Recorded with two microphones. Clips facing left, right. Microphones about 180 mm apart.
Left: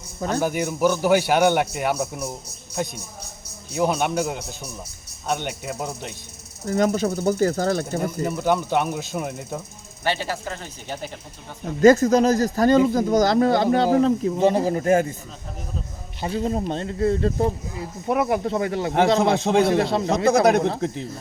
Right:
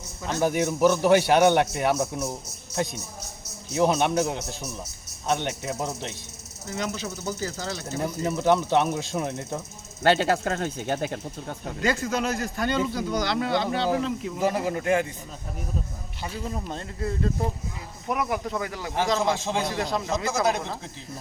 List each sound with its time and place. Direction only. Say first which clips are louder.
0.4 s a man's voice: right 2 dB; centre (ahead or behind)
6.7 s speech: left 10 dB; 50° left (ahead or behind)
8.0 s a man's voice: right 2 dB; centre (ahead or behind)
10.3 s speech: right 6 dB; 60° right (ahead or behind)
11.8 s a man's voice: left 12 dB; 45° left (ahead or behind)
16.2 s a man's voice: left 9 dB; 30° left (ahead or behind)
19.2 s speech: left 7 dB; 60° left (ahead or behind)
19.8 s speech: left 6 dB; 30° left (ahead or behind)
20.1 s speech: left 9 dB; 60° left (ahead or behind)